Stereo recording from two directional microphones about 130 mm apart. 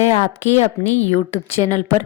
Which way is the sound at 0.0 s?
55° left (ahead or behind).